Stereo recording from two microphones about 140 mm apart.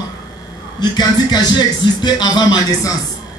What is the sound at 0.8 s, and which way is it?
Speech, 30° left (ahead or behind).